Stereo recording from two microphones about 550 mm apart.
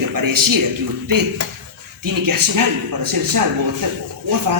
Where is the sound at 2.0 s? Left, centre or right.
Right.